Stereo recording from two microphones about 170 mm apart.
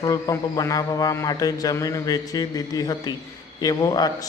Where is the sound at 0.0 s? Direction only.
20° left (ahead or behind).